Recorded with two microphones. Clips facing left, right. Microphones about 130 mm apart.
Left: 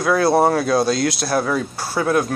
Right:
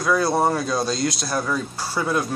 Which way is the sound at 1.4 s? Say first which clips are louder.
Left 4 dB; 65° left (ahead or behind).